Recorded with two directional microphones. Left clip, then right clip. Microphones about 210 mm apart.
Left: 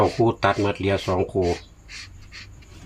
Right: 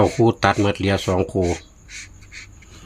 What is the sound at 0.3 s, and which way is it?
Speech, 45° right (ahead or behind).